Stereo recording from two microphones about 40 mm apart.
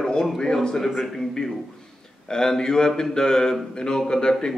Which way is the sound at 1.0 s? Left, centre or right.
Centre.